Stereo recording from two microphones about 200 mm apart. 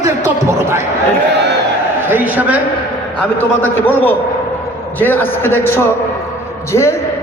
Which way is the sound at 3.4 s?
10° left (ahead or behind).